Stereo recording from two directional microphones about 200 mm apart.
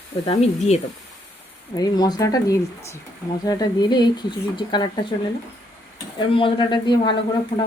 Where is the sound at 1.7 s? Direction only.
20° left (ahead or behind).